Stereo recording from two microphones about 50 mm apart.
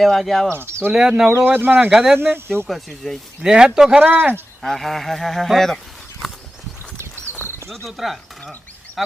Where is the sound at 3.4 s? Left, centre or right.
Centre.